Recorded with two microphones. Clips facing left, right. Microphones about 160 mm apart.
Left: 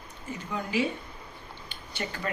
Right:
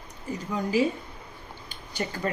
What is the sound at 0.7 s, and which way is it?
Speech, 40° right (ahead or behind).